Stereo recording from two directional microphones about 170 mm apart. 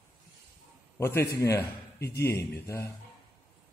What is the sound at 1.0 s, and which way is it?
A man's voice, 15° left (ahead or behind).